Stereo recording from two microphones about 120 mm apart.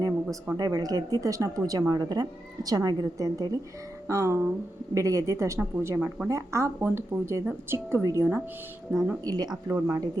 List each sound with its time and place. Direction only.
0.0 s speech: 30° right (ahead or behind)
5.5 s speech: 15° right (ahead or behind)
6.2 s speech: 25° right (ahead or behind)
9.6 s speech: 20° right (ahead or behind)